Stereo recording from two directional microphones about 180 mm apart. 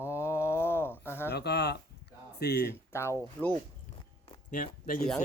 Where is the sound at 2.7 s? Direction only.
15° left (ahead or behind).